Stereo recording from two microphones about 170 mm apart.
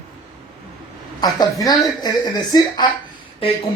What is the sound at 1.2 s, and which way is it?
Speech, 25° left (ahead or behind).